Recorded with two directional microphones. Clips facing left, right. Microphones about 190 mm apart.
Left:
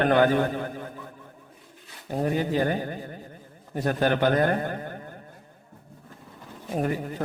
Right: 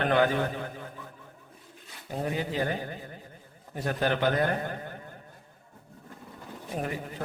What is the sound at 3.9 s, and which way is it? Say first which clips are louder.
Speech: left 4 dB; 45° left (ahead or behind).